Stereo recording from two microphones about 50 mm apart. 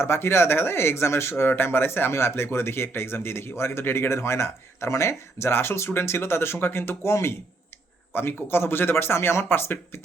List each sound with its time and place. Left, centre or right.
0.0 s speech: left
4.1 s speech: left
8.1 s speech: left